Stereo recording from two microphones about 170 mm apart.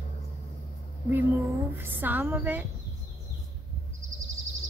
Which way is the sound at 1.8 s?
10° right (ahead or behind).